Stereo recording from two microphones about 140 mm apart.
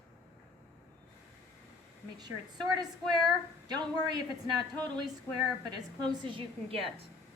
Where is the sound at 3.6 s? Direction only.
30° right (ahead or behind).